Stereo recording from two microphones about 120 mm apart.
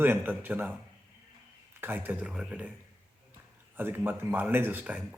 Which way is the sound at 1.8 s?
15° right (ahead or behind).